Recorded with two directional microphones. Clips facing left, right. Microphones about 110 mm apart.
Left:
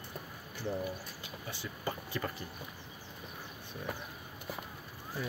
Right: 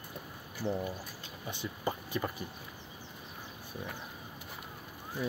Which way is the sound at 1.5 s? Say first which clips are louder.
Right 4 dB; 20° right (ahead or behind).